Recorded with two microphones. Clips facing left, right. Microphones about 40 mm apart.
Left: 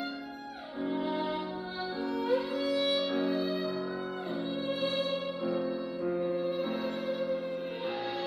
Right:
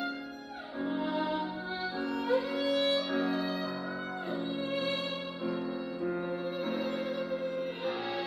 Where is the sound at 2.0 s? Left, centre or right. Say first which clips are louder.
Left 2 dB; right.